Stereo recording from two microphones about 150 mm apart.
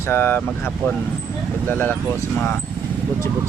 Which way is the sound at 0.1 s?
15° left (ahead or behind).